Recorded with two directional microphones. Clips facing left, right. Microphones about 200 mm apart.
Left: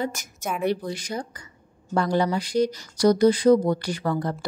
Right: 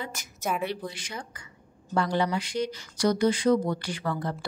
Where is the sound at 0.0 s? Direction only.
45° left (ahead or behind).